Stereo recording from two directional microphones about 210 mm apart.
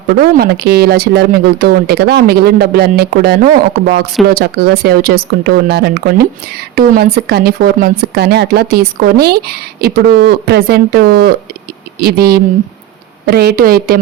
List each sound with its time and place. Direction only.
0.1 s speech: 50° right (ahead or behind)